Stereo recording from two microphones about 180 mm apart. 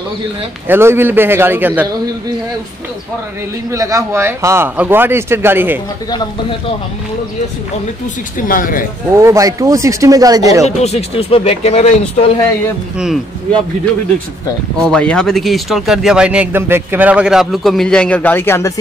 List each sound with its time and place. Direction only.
0.7 s speech: 15° right (ahead or behind)
3.7 s speech: 15° right (ahead or behind)
8.4 s speech: 50° left (ahead or behind)
9.1 s speech: 15° right (ahead or behind)
10.8 s speech: 35° left (ahead or behind)
12.9 s speech: 5° right (ahead or behind)
14.8 s speech: 5° left (ahead or behind)